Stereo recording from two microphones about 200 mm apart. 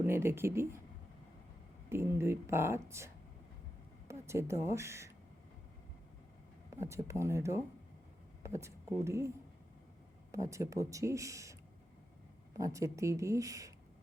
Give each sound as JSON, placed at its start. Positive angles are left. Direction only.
{"t": 0.0, "sound": "speech", "side_deg": -10}
{"t": 1.9, "sound": "speech", "side_deg": -10}
{"t": 4.1, "sound": "speech", "side_deg": -15}
{"t": 6.7, "sound": "speech", "side_deg": -15}
{"t": 9.0, "sound": "speech", "side_deg": -15}
{"t": 10.3, "sound": "speech", "side_deg": -15}
{"t": 12.5, "sound": "speech", "side_deg": -15}